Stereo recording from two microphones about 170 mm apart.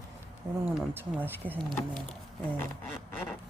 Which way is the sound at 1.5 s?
5° left (ahead or behind).